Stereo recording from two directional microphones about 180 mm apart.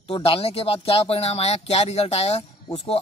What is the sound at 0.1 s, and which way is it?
Speech, 30° left (ahead or behind).